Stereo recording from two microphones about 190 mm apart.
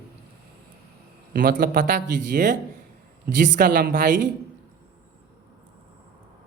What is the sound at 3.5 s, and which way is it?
Speech, 50° right (ahead or behind).